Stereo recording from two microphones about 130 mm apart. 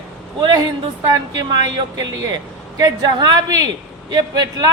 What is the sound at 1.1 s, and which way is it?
A man's voice, 30° right (ahead or behind).